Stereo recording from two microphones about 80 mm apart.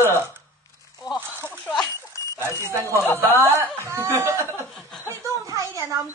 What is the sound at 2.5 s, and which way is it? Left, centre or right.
Speech, right.